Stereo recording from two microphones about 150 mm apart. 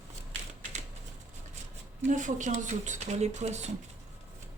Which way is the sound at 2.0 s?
55° right (ahead or behind).